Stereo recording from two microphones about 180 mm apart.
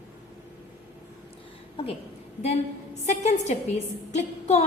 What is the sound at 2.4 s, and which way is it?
A woman's voice, 35° left (ahead or behind).